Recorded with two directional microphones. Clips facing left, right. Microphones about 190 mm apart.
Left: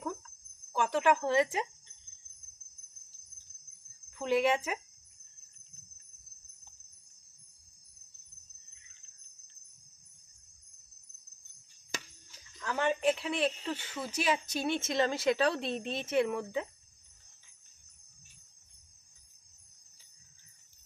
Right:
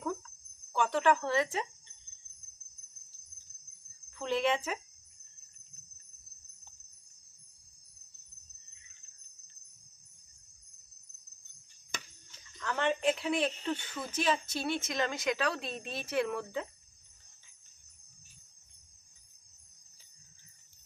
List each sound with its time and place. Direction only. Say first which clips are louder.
0.7 s a woman's voice: even; 10° left (ahead or behind)
4.2 s a woman's voice: left 2 dB; 10° left (ahead or behind)
12.5 s a woman's voice: even; 5° left (ahead or behind)